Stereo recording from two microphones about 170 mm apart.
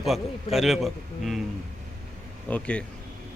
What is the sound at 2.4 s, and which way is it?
Speech, 10° left (ahead or behind).